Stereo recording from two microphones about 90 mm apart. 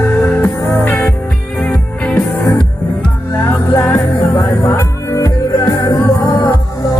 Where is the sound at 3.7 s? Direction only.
30° left (ahead or behind).